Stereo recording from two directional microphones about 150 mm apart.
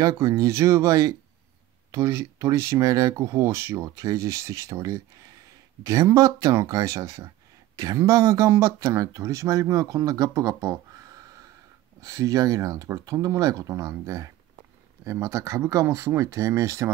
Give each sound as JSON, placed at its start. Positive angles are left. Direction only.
{"t": 0.0, "sound": "speech", "side_deg": -20}